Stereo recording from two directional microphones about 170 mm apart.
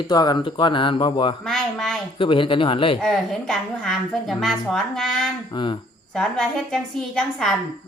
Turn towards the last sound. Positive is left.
turn(degrees=5)  # may be behind; listen again after turning